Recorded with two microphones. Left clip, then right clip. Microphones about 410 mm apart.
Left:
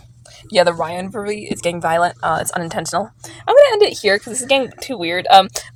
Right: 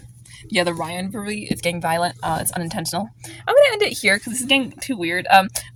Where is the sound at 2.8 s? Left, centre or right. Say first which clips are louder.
Left 5 dB; right.